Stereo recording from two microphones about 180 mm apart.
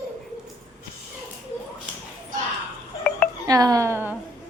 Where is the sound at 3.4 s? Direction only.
20° right (ahead or behind).